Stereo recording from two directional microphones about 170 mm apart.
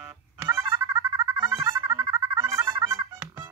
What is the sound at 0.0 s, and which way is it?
Music, 15° right (ahead or behind).